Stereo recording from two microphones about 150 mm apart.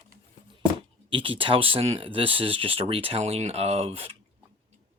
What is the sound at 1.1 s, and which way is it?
Speech, 35° right (ahead or behind).